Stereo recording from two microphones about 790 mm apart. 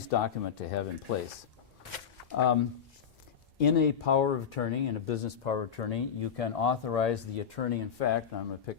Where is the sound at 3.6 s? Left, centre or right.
Left.